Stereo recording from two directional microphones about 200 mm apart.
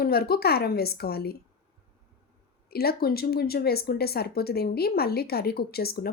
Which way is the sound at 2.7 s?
50° left (ahead or behind).